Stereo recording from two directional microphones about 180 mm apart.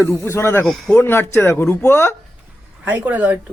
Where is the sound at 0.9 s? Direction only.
10° left (ahead or behind).